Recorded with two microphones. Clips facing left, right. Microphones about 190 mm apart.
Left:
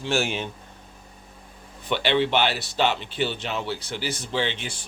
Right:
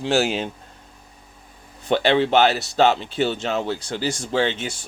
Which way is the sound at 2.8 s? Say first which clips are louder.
Right 5 dB; 45° right (ahead or behind).